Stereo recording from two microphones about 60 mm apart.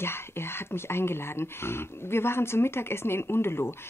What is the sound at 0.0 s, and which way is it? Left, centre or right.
Speech, left.